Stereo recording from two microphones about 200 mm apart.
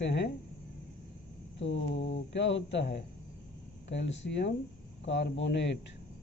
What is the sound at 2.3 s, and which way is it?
A man's voice, 65° left (ahead or behind).